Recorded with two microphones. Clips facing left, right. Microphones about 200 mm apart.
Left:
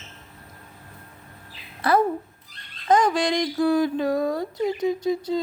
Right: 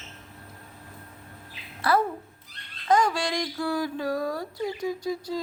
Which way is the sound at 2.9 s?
20° left (ahead or behind).